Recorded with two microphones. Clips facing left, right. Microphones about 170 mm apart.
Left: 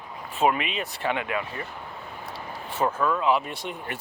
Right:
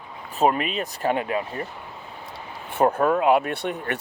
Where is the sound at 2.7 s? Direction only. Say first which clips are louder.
Right 5 dB; 60° right (ahead or behind).